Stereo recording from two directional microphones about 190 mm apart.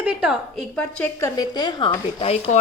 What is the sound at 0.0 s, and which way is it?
A woman's voice, 5° right (ahead or behind).